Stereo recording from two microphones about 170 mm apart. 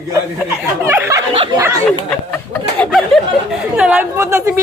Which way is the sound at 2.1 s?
10° left (ahead or behind).